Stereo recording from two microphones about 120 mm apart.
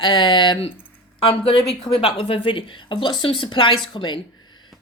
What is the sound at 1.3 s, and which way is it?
Speech, 50° left (ahead or behind).